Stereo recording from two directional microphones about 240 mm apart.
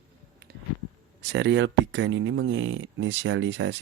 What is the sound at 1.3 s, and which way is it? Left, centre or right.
Speech, right.